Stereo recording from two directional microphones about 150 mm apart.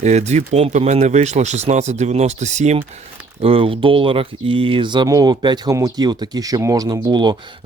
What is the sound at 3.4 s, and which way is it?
Speech, 40° right (ahead or behind).